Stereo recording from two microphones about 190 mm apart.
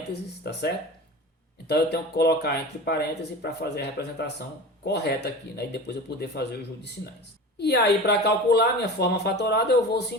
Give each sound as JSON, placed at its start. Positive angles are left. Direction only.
{"t": 1.6, "sound": "speech", "side_deg": 60}
{"t": 7.6, "sound": "speech", "side_deg": 60}